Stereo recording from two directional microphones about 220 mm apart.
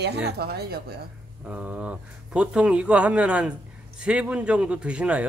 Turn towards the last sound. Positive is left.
turn(degrees=-5)  # may be behind; listen again after turning